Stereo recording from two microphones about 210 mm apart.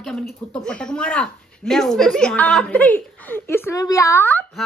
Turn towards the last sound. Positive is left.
turn(degrees=10)  # may be behind; listen again after turning